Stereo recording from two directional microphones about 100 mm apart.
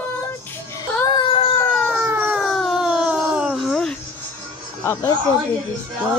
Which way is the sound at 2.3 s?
Centre (ahead or behind).